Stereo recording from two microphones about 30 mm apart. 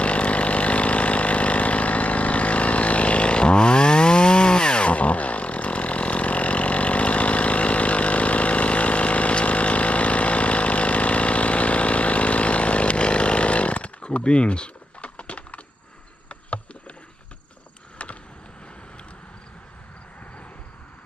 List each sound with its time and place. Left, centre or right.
0.0 s vehicle: left
4.9 s vehicle: left